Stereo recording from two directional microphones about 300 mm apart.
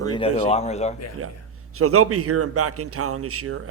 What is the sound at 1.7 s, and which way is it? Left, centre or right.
A man's voice, right.